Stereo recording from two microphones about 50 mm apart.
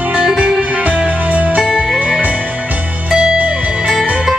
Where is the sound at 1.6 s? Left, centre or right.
Centre.